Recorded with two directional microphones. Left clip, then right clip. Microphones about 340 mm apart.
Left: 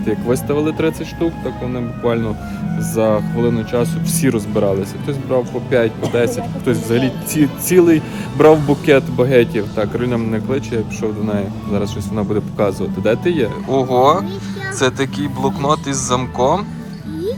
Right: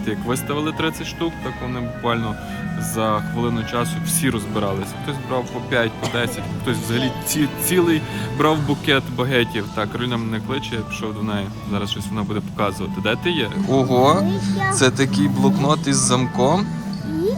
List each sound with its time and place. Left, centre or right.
0.0 s speech: centre